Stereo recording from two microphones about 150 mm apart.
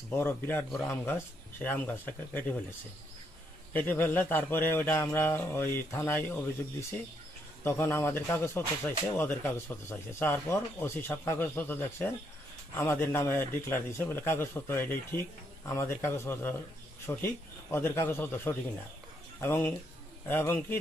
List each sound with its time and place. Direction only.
0.1 s speech: 15° left (ahead or behind)
3.7 s speech: 10° left (ahead or behind)